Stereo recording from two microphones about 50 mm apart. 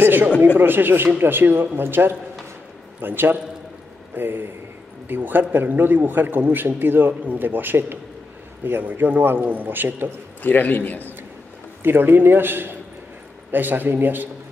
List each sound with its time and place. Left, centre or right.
0.0 s a sound: right
0.6 s a man's voice: right
10.4 s a man's voice: left
11.8 s a man's voice: right